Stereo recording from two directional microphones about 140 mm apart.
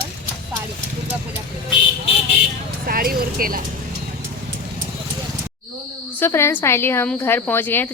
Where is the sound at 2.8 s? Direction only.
90° right.